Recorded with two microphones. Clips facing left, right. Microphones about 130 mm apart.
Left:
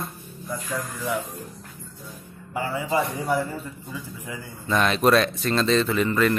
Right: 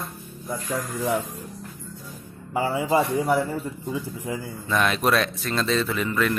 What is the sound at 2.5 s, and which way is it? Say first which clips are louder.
A man's voice: right 3 dB; 25° right (ahead or behind).